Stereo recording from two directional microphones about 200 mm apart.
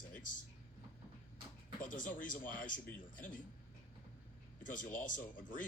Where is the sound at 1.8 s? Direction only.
40° left (ahead or behind).